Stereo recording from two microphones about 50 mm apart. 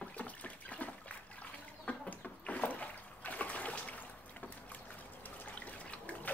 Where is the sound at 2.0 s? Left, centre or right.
Left.